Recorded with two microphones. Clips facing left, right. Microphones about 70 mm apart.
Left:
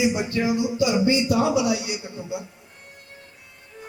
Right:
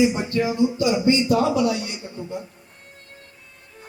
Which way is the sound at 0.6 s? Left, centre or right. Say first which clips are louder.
Right 2 dB; centre.